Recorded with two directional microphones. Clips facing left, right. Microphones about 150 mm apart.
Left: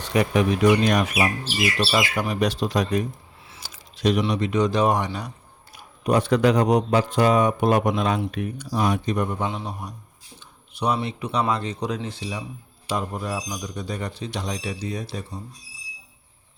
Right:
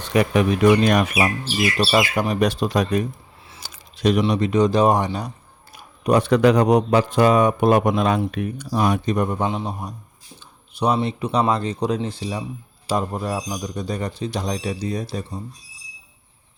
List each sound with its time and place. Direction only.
0.1 s a man's voice: 65° right (ahead or behind)
1.9 s speech: 45° right (ahead or behind)
3.6 s a sound: 55° right (ahead or behind)
4.2 s speech: 40° right (ahead or behind)
5.7 s a man's voice: 65° right (ahead or behind); by 9.5 s 45° right (ahead or behind)
9.5 s a man's voice: 25° right (ahead or behind)